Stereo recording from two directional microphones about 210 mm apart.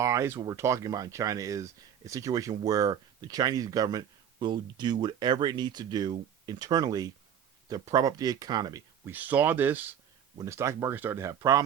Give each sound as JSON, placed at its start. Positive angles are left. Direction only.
{"t": 0.0, "sound": "speech", "side_deg": -15}